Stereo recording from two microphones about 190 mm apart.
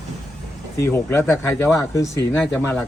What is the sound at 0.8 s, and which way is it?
A man's voice, 10° left (ahead or behind).